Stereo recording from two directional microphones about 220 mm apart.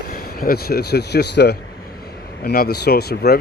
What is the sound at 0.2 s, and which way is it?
Speech, 45° left (ahead or behind).